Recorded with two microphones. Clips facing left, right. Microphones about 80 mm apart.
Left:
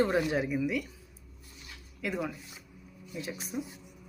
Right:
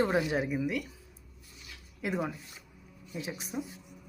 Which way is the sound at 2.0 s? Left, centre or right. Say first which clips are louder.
Right 1 dB; right.